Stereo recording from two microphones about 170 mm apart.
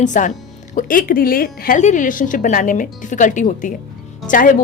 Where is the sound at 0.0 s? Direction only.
45° left (ahead or behind).